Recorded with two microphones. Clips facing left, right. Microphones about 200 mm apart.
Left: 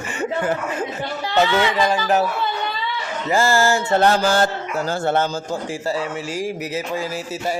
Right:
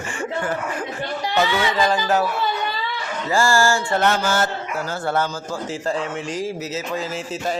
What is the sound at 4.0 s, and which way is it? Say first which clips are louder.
Speech: left 5 dB; 30° left (ahead or behind).